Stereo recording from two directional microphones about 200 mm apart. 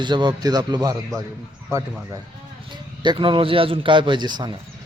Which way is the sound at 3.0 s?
25° right (ahead or behind).